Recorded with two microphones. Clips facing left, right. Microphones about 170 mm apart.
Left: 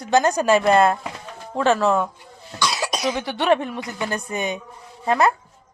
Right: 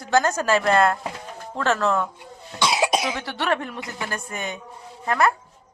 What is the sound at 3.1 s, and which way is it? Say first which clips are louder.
A woman's voice: left 5 dB; 20° left (ahead or behind).